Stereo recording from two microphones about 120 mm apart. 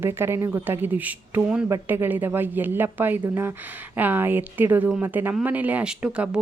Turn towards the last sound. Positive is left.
turn(degrees=-10)  # may be behind; listen again after turning